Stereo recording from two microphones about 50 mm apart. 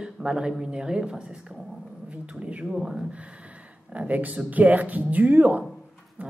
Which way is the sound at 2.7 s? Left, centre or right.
Centre.